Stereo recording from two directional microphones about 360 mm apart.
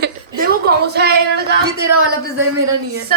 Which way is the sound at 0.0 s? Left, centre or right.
Right.